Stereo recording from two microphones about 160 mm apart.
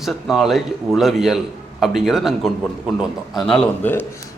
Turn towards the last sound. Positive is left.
turn(degrees=10)  # may be behind; listen again after turning